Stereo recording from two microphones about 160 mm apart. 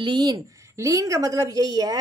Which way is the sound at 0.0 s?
25° right (ahead or behind).